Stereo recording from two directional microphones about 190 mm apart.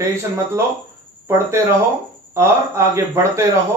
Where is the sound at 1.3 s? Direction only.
15° right (ahead or behind).